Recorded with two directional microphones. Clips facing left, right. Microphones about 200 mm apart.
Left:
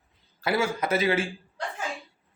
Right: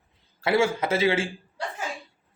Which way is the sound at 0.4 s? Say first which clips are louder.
Right 3 dB; 25° right (ahead or behind).